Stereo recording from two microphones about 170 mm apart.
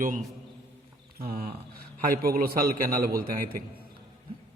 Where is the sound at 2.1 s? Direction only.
60° right (ahead or behind).